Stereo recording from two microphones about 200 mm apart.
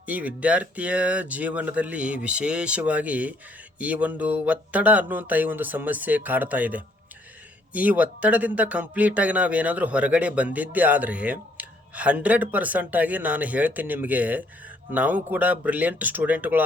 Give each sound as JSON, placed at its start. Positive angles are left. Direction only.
{"t": 0.0, "sound": "speech", "side_deg": -5}